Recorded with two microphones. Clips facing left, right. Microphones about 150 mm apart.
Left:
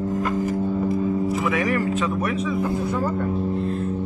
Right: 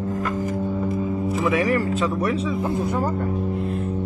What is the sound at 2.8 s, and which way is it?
Speech, 40° right (ahead or behind).